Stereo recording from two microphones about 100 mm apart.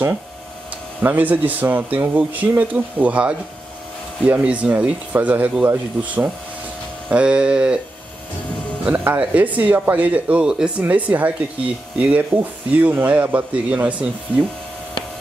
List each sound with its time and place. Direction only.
1.0 s speech: 15° right (ahead or behind)
8.8 s speech: 15° right (ahead or behind)